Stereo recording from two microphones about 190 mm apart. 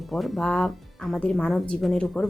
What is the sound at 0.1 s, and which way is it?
Speech, centre (ahead or behind).